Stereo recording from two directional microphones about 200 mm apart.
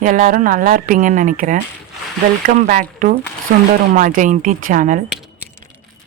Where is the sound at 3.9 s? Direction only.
40° right (ahead or behind).